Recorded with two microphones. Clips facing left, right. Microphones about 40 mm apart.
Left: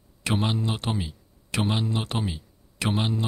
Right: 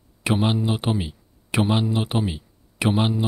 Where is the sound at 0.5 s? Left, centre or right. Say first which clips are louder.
Right 5 dB; centre.